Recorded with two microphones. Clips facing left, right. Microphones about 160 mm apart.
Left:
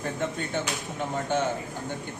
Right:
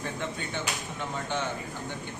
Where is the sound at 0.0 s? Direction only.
45° left (ahead or behind).